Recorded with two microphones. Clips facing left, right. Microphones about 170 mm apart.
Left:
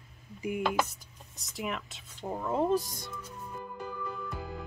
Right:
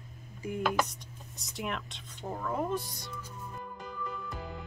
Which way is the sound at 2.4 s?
25° left (ahead or behind).